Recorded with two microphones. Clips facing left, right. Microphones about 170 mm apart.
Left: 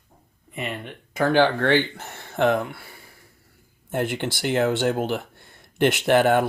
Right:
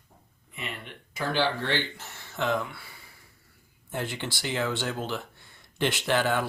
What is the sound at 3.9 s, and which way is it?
Speech, 55° left (ahead or behind).